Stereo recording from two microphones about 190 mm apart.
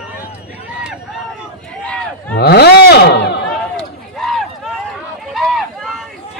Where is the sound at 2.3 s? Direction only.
55° left (ahead or behind).